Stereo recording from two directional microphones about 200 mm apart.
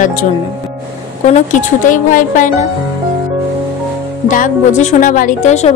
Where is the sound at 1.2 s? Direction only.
35° left (ahead or behind).